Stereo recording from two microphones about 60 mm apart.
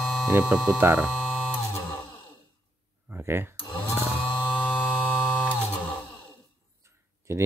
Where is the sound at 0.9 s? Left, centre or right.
Right.